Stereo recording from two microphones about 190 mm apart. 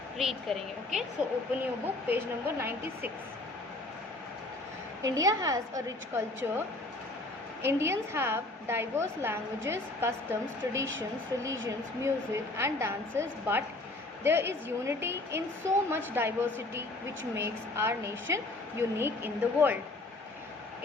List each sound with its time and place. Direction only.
0.2 s a woman's voice: centre (ahead or behind)
5.0 s a woman's voice: 15° right (ahead or behind)
7.6 s a woman's voice: 15° right (ahead or behind)
12.0 s a woman's voice: 15° right (ahead or behind)